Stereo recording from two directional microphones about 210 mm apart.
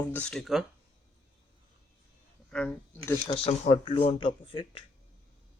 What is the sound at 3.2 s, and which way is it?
Speech, 30° left (ahead or behind).